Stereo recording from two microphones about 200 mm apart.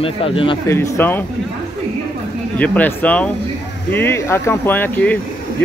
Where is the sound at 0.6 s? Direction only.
10° left (ahead or behind).